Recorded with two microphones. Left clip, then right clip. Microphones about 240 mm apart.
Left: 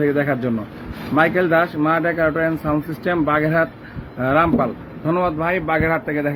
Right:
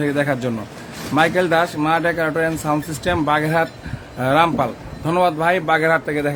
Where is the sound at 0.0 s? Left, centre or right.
Centre.